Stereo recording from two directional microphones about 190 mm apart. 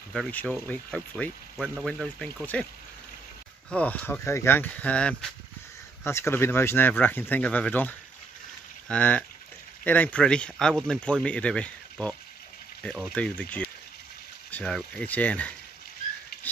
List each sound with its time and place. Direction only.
0.1 s speech: 5° left (ahead or behind)
3.7 s speech: 5° left (ahead or behind)